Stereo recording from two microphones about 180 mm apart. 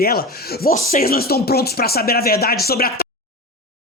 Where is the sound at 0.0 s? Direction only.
55° left (ahead or behind).